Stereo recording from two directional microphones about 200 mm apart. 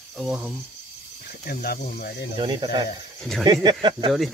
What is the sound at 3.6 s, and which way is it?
Speech, 25° right (ahead or behind).